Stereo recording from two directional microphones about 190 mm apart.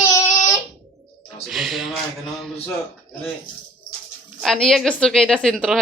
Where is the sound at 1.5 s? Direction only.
Centre (ahead or behind).